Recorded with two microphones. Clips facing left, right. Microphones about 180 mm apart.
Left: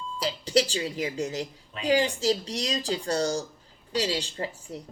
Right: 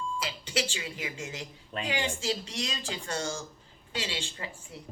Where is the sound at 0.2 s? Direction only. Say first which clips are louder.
Left 12 dB; 35° left (ahead or behind).